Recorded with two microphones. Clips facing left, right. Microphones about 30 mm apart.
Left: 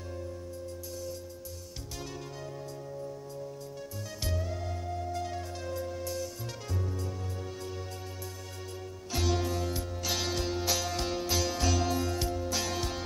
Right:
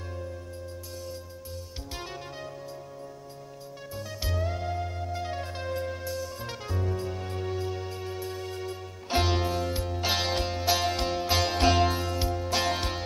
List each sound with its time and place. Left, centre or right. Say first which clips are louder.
4.4 s music: right 6 dB; right
6.0 s music: right 2 dB; centre
6.9 s music: right 6 dB; right
7.5 s music: right 7 dB; right
12.0 s music: right 2 dB; right